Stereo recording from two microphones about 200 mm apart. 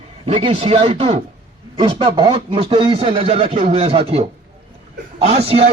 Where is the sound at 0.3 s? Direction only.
30° right (ahead or behind).